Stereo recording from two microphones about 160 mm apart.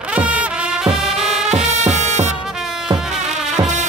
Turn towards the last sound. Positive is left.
turn(degrees=-50)  # may be behind; listen again after turning